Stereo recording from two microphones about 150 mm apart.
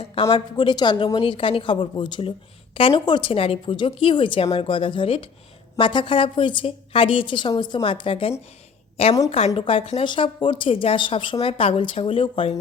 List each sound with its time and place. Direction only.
0.0 s speech: 40° left (ahead or behind)
0.5 s speech: 30° left (ahead or behind)